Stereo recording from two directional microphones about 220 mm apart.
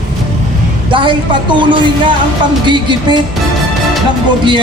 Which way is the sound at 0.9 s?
20° right (ahead or behind).